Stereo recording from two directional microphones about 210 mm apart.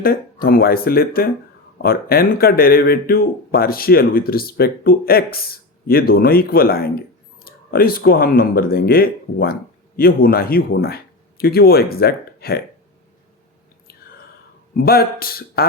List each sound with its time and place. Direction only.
0.0 s speech: 45° left (ahead or behind)
14.8 s speech: 45° left (ahead or behind)